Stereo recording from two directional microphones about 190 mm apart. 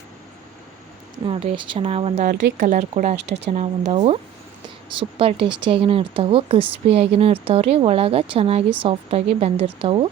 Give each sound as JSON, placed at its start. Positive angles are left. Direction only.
{"t": 1.2, "sound": "speech", "side_deg": -25}